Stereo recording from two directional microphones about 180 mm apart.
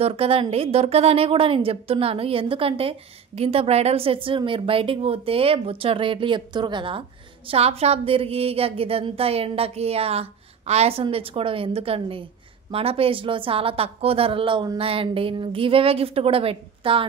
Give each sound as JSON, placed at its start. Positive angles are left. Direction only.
{"t": 0.0, "sound": "a woman's voice", "side_deg": -30}